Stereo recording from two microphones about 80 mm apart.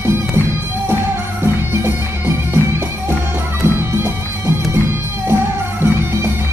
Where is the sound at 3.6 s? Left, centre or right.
Right.